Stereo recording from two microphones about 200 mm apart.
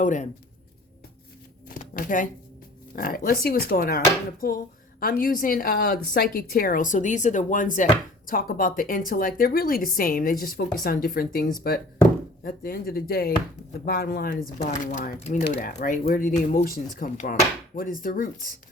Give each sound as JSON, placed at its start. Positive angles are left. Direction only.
{"t": 0.0, "sound": "speech", "side_deg": 40}
{"t": 1.6, "sound": "chopping", "side_deg": 45}
{"t": 2.9, "sound": "speech", "side_deg": 45}